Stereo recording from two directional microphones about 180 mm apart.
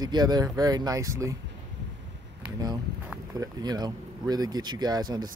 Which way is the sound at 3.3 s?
20° right (ahead or behind).